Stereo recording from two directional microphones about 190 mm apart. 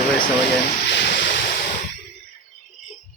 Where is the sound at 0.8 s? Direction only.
60° left (ahead or behind); by 1.8 s 45° left (ahead or behind).